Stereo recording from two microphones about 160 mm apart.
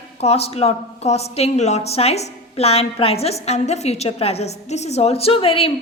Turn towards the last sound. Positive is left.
turn(degrees=35)  # may be behind; listen again after turning